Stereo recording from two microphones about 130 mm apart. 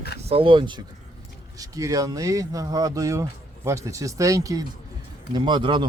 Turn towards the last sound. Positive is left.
turn(degrees=-40)  # may be behind; listen again after turning